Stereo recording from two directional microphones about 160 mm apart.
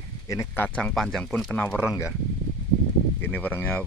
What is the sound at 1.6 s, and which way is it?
Speech, 15° left (ahead or behind).